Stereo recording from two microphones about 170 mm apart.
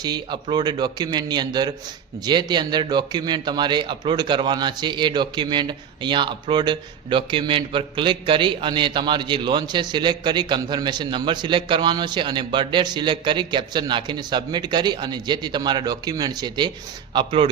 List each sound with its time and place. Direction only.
0.0 s a man's voice: 25° right (ahead or behind)